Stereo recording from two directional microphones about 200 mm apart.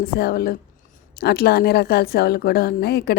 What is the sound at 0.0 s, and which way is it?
A woman's voice, 50° left (ahead or behind).